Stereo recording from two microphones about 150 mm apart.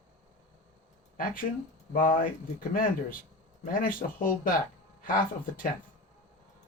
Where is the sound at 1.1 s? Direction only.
65° left (ahead or behind).